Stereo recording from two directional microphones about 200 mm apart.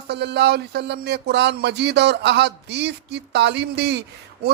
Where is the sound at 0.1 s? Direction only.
55° right (ahead or behind).